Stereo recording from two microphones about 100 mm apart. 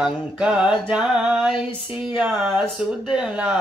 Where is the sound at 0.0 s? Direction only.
5° right (ahead or behind).